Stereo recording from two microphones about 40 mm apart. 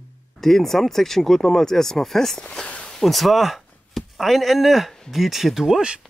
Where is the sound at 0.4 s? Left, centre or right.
Centre.